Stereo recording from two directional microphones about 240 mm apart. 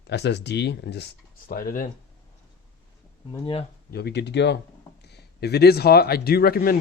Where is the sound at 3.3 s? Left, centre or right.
Left.